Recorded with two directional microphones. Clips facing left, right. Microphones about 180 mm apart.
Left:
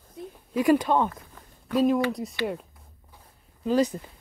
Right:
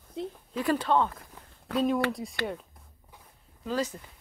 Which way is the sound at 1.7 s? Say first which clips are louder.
Left 4 dB; centre (ahead or behind).